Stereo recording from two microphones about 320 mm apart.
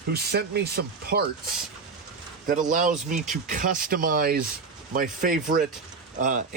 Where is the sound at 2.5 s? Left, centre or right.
Right.